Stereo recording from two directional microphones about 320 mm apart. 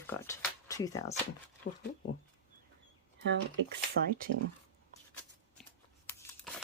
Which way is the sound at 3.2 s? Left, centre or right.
Right.